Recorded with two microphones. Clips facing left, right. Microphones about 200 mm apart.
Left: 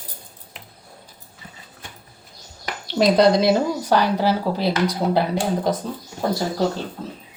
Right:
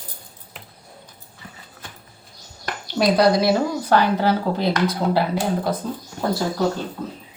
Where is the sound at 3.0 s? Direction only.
20° left (ahead or behind).